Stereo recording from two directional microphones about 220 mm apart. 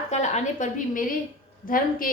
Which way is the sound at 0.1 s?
30° left (ahead or behind).